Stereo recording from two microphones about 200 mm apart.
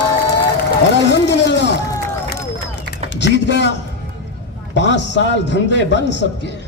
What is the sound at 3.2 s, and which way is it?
Speech, 60° left (ahead or behind).